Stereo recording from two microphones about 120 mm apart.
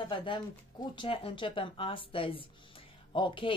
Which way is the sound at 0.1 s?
45° left (ahead or behind).